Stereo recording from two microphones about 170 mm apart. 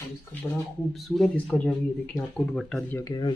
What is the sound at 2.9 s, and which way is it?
Speech, 20° left (ahead or behind).